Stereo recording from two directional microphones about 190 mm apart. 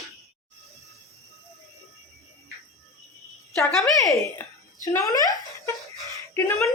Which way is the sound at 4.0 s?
20° left (ahead or behind).